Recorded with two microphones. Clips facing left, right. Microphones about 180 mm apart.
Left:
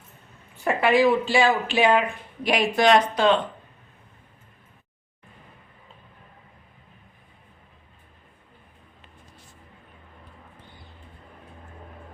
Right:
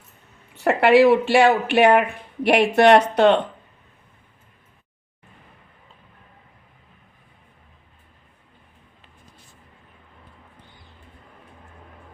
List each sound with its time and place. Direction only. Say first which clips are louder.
0.5 s speech: right 5 dB; 75° right (ahead or behind)